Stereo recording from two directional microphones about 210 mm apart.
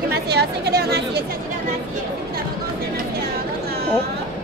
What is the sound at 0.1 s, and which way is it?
Chatter, 50° right (ahead or behind).